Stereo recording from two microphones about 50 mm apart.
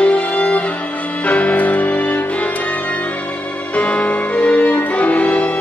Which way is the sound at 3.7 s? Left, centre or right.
Left.